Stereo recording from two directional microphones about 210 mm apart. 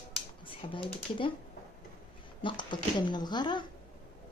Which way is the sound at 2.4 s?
20° left (ahead or behind).